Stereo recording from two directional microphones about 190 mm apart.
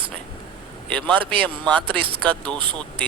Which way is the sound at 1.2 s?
25° right (ahead or behind).